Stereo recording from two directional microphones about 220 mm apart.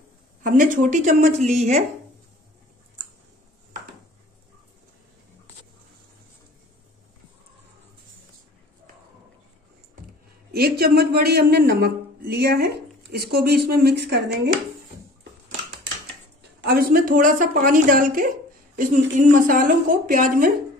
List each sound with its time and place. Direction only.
0.4 s a woman's voice: 35° right (ahead or behind)
10.5 s speech: 45° right (ahead or behind)
16.6 s a woman's voice: 40° right (ahead or behind)